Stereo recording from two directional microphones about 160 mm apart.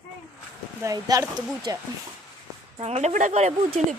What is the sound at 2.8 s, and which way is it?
Speech, 45° right (ahead or behind).